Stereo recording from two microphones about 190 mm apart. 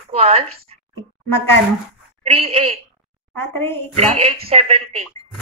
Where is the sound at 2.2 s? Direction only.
30° right (ahead or behind).